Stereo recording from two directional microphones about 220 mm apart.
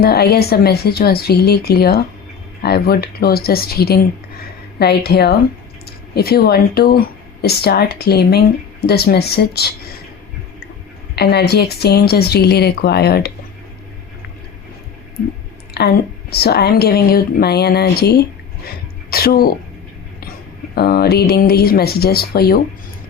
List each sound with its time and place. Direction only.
0.0 s a woman's voice: 45° left (ahead or behind)
11.1 s a woman's voice: 45° left (ahead or behind)
15.7 s a woman's voice: 45° left (ahead or behind)
20.7 s a woman's voice: 45° left (ahead or behind)